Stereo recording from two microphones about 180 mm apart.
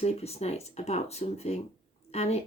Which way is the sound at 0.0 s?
35° left (ahead or behind).